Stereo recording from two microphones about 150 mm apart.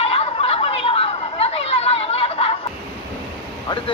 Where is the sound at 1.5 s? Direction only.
40° left (ahead or behind).